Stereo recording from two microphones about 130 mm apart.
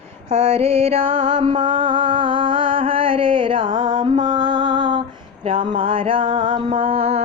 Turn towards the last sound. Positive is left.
turn(degrees=-50)  # may be behind; listen again after turning